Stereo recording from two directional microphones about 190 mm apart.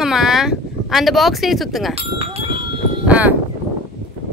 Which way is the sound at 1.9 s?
30° right (ahead or behind).